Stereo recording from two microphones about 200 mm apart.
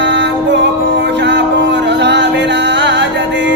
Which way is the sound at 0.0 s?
60° right (ahead or behind).